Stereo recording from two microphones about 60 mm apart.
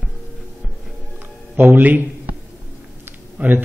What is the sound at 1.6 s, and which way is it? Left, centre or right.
Speech, right.